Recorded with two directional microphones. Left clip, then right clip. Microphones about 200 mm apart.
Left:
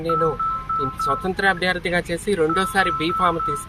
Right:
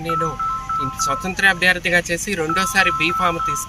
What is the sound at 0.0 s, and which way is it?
Speech, 25° right (ahead or behind).